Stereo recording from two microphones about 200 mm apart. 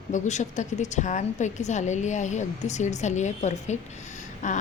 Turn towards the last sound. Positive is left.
turn(degrees=35)  # may be behind; listen again after turning